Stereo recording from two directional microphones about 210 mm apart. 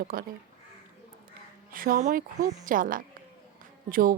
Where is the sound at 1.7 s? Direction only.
40° right (ahead or behind).